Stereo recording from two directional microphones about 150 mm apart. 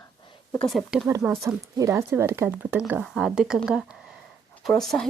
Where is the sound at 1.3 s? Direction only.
20° right (ahead or behind); by 5.0 s 5° left (ahead or behind).